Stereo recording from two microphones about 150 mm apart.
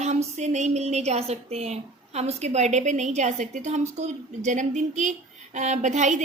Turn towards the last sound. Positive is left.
turn(degrees=-55)  # may be behind; listen again after turning